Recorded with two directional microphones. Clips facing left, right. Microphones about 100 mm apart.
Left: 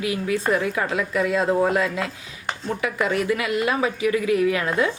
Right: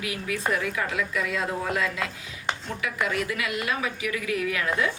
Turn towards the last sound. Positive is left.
turn(degrees=30)  # may be behind; listen again after turning